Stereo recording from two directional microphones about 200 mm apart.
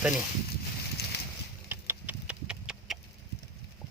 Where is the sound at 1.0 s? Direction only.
55° left (ahead or behind).